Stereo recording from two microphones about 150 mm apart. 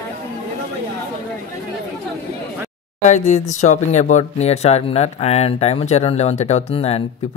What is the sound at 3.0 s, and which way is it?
Speech, 50° left (ahead or behind).